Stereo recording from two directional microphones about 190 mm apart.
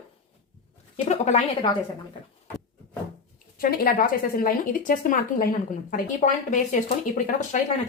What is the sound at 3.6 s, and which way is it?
Speech, 50° left (ahead or behind).